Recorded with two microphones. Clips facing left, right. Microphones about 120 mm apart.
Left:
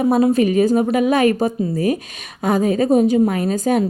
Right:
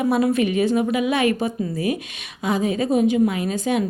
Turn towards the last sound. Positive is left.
turn(degrees=40)  # may be behind; listen again after turning